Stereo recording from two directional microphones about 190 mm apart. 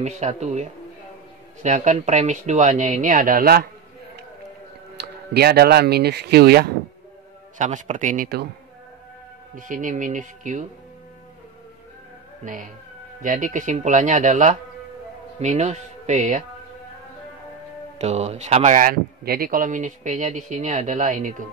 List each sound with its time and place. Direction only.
0.0 s speech: 35° right (ahead or behind); by 3.6 s 55° right (ahead or behind)
5.0 s music: 60° right (ahead or behind)
5.3 s speech: 55° right (ahead or behind)
7.5 s speech: 40° right (ahead or behind)
9.6 s speech: 45° right (ahead or behind)
13.2 s speech: 45° right (ahead or behind)
17.9 s speech: 35° right (ahead or behind)